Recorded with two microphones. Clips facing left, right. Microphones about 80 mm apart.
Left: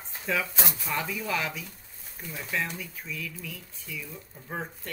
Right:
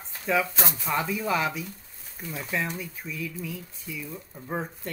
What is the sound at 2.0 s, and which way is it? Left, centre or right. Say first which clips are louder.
Speech: right 3 dB; centre.